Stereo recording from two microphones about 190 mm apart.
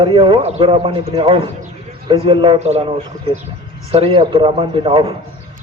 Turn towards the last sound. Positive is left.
turn(degrees=-25)  # may be behind; listen again after turning